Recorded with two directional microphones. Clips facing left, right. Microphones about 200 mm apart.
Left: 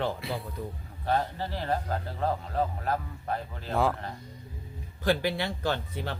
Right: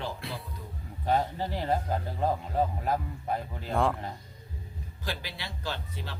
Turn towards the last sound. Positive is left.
turn(degrees=55)  # may be behind; listen again after turning